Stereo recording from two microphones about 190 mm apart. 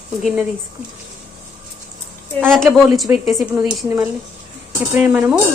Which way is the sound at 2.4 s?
Centre (ahead or behind).